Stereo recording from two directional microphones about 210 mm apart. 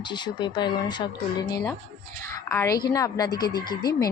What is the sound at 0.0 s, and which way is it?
A woman's voice, 20° left (ahead or behind).